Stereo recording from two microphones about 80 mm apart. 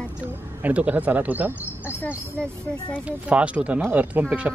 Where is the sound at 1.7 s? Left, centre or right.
Left.